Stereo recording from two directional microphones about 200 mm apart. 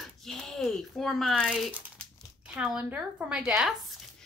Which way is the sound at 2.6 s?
5° right (ahead or behind).